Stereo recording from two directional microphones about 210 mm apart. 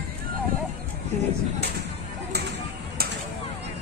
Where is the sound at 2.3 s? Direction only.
50° right (ahead or behind).